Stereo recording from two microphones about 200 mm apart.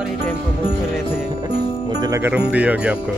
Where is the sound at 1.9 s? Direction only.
15° right (ahead or behind).